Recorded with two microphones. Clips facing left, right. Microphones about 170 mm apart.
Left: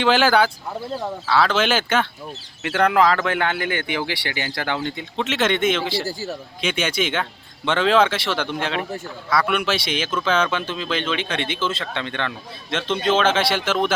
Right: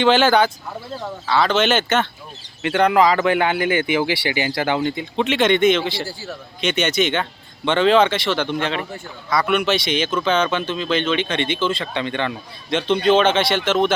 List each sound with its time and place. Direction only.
0.0 s speech: 5° left (ahead or behind)
6.0 s a man's voice: 40° left (ahead or behind)
6.6 s speech: 5° left (ahead or behind)